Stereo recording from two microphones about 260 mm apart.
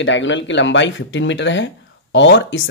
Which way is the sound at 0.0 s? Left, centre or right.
Left.